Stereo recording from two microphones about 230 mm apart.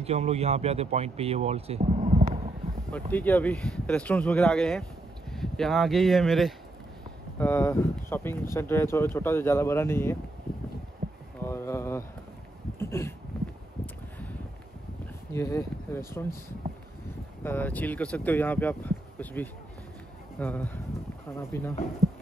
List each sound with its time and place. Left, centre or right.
0.0 s speech: right
2.9 s speech: centre
7.3 s speech: centre
11.4 s a sound: centre
15.3 s speech: centre
17.4 s speech: centre